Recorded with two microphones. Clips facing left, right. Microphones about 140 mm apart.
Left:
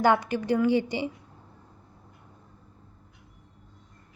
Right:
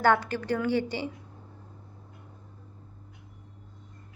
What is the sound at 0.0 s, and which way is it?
A woman's voice, 15° left (ahead or behind).